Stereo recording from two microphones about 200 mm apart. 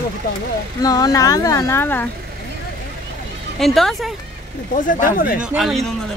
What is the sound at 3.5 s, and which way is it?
Speech, centre (ahead or behind).